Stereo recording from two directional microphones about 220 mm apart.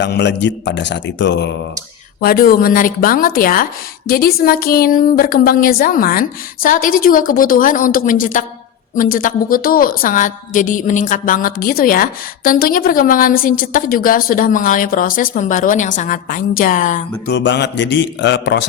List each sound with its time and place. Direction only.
0.0 s a man's voice: 50° left (ahead or behind)
2.2 s a woman's voice: 40° left (ahead or behind)
17.2 s a man's voice: 50° left (ahead or behind)